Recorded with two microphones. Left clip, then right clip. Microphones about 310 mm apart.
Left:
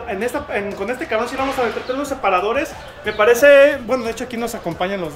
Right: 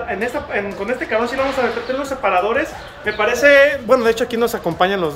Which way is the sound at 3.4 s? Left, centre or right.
Left.